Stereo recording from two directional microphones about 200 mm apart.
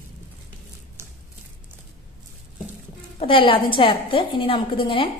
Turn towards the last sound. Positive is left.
turn(degrees=25)  # may be behind; listen again after turning